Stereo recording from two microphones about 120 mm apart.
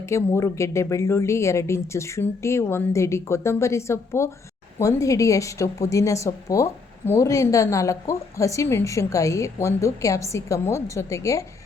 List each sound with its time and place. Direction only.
0.0 s a woman's voice: 25° left (ahead or behind)